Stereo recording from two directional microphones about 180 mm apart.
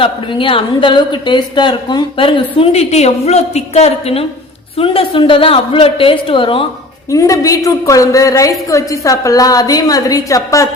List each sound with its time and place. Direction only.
0.0 s a woman's voice: 30° left (ahead or behind)
7.1 s a woman's voice: 20° left (ahead or behind)